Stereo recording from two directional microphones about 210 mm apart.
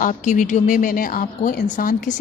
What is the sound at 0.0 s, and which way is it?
A woman's voice, 35° left (ahead or behind).